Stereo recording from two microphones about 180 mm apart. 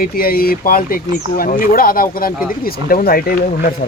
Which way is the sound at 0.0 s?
55° left (ahead or behind).